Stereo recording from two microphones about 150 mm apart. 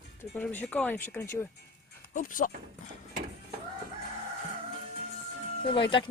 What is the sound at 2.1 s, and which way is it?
Speech, 65° left (ahead or behind).